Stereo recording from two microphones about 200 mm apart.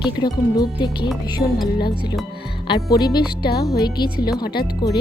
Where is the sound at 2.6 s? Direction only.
20° left (ahead or behind).